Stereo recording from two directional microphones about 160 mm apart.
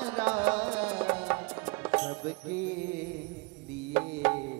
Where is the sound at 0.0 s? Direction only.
10° right (ahead or behind).